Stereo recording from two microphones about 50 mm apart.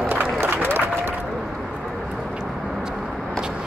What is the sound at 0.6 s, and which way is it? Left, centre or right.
Applause, right.